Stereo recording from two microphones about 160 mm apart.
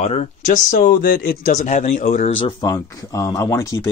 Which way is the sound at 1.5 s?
50° left (ahead or behind).